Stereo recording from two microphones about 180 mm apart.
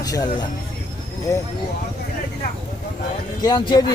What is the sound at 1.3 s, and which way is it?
Speech, 15° left (ahead or behind).